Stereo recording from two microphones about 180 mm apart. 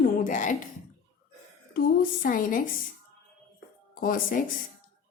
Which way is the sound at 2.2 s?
50° left (ahead or behind).